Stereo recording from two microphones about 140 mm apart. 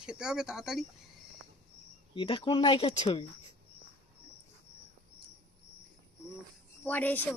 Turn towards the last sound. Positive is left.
turn(degrees=10)  # may be behind; listen again after turning